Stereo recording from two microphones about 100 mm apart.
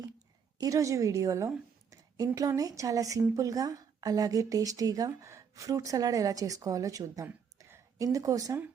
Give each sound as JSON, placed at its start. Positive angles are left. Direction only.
{"t": 0.6, "sound": "a woman's voice", "side_deg": -35}